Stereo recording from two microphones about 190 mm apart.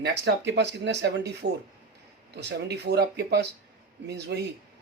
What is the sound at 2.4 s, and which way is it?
Speech, 60° right (ahead or behind).